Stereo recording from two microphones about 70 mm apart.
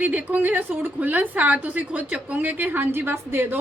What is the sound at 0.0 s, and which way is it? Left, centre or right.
A woman's voice, right.